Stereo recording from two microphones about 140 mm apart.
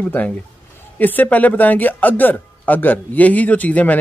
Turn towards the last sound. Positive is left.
turn(degrees=10)  # may be behind; listen again after turning